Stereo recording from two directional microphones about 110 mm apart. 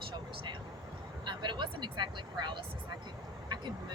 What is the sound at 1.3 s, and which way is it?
Speech, 45° right (ahead or behind).